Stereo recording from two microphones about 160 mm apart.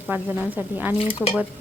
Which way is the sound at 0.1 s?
10° right (ahead or behind).